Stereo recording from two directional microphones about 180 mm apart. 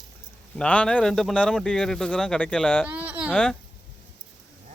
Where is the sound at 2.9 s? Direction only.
10° right (ahead or behind).